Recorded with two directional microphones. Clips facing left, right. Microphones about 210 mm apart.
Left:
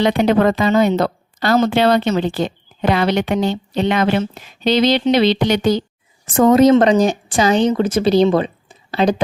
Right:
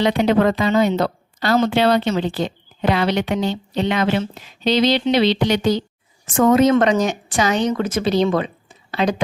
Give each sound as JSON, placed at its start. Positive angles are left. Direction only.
{"t": 0.0, "sound": "a woman's voice", "side_deg": 50}
{"t": 6.3, "sound": "a woman's voice", "side_deg": 35}